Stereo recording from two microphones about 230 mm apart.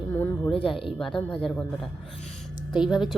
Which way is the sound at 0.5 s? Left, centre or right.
Left.